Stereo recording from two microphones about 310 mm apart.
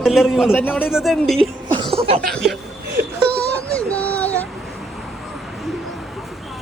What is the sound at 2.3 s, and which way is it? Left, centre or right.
Speech, centre.